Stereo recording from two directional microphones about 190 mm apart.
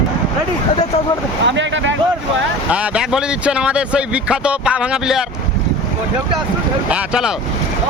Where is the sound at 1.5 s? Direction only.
70° right (ahead or behind).